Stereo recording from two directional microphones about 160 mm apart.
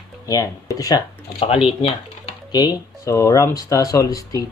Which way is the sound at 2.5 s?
25° left (ahead or behind).